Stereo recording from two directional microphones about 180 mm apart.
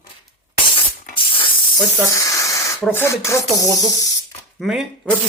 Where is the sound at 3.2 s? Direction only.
15° left (ahead or behind).